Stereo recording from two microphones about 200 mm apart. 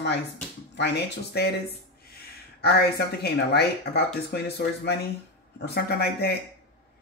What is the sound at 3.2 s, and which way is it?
Speech, 55° left (ahead or behind).